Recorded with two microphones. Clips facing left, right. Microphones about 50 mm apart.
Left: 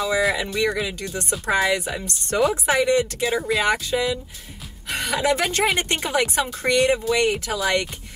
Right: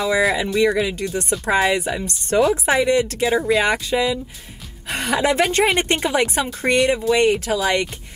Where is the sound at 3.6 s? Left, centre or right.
Right.